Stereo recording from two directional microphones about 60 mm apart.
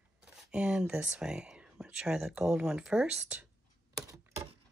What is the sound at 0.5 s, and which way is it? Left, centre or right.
Speech, centre.